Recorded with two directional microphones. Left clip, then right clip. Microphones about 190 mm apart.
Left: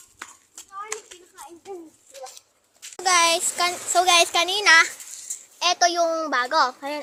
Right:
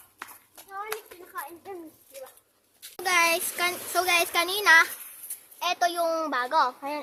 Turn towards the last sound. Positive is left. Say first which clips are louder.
# left 3 dB
turn(degrees=15)  # may be behind; listen again after turning